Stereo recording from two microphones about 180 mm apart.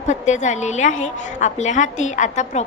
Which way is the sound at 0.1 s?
40° left (ahead or behind).